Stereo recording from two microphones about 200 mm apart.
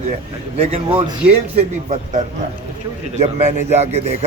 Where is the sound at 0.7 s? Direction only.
30° right (ahead or behind).